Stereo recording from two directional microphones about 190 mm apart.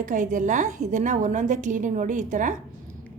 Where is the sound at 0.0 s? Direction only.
45° right (ahead or behind).